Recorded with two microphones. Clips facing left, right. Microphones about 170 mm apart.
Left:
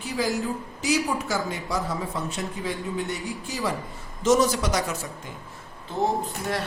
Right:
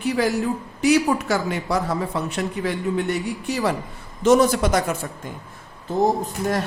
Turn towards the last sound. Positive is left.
turn(degrees=-45)  # may be behind; listen again after turning